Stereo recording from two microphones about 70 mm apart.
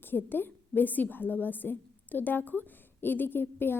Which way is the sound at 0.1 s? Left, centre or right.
Left.